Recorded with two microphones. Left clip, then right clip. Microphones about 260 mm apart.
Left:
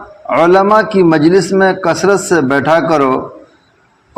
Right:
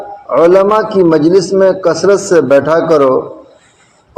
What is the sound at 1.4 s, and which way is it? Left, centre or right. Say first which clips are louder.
Mantra: right 2 dB; left.